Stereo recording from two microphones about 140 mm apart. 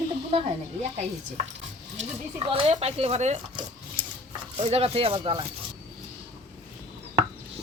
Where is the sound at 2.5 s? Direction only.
40° right (ahead or behind).